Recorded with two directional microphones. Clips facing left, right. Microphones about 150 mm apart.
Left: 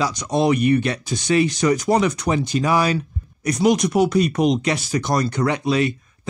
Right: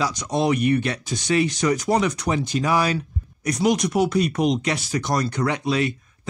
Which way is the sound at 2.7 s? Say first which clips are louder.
Left 2 dB; 35° left (ahead or behind).